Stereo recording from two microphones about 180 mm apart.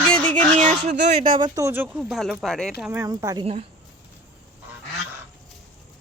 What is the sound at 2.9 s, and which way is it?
Speech, 15° right (ahead or behind).